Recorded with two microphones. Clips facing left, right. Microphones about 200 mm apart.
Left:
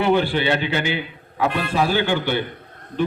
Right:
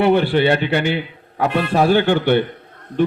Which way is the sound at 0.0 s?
60° right (ahead or behind).